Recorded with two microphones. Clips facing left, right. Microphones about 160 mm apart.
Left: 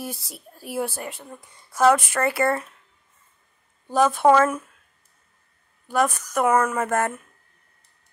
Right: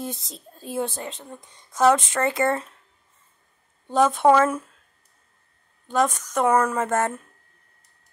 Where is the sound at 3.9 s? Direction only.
20° right (ahead or behind).